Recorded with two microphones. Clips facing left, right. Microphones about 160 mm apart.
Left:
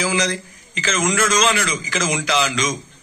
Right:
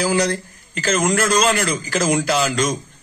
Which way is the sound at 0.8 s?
50° right (ahead or behind).